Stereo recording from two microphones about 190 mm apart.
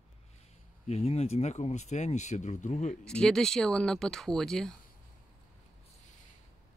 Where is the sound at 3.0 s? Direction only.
5° left (ahead or behind).